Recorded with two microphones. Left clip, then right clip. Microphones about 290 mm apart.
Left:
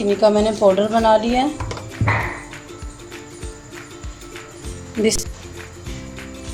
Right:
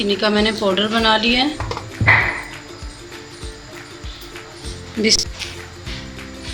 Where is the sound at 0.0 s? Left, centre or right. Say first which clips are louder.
Left 2 dB; centre.